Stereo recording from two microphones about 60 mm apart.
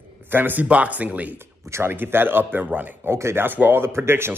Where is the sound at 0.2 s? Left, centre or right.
Right.